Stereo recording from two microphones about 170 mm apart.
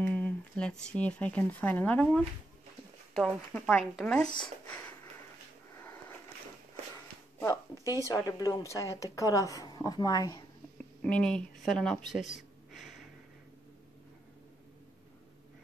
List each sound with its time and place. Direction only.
0.0 s a sound: 10° left (ahead or behind)
0.8 s speech: 5° left (ahead or behind)
7.3 s a woman's voice: 20° left (ahead or behind)
7.8 s speech: 20° right (ahead or behind)
8.1 s speech: 20° left (ahead or behind)
11.0 s speech: 5° left (ahead or behind)
12.4 s a sound: centre (ahead or behind)